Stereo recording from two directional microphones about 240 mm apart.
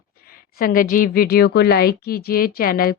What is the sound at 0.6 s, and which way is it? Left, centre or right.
A woman's voice, left.